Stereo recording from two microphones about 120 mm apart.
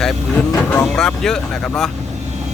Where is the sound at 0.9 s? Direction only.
5° left (ahead or behind).